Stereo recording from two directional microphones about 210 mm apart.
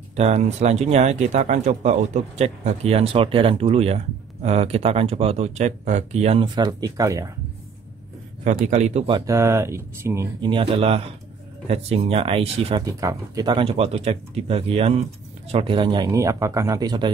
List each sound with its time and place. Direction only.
0.1 s speech: 30° right (ahead or behind); by 7.2 s 15° right (ahead or behind)
8.6 s speech: 30° right (ahead or behind); by 10.5 s 15° right (ahead or behind)
10.5 s speech: 25° right (ahead or behind)
12.8 s speech: 15° right (ahead or behind)